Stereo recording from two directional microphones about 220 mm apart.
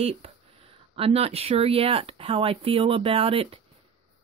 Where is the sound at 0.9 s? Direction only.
25° right (ahead or behind).